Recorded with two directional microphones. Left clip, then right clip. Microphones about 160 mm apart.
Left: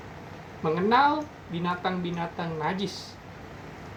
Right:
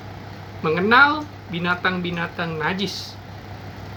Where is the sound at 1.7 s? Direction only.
40° right (ahead or behind).